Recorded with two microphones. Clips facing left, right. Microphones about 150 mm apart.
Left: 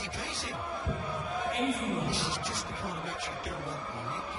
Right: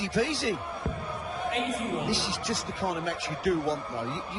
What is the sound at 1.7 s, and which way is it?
A man's voice, 90° right.